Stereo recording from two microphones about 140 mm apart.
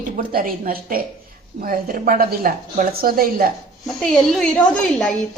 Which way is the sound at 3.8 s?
5° left (ahead or behind).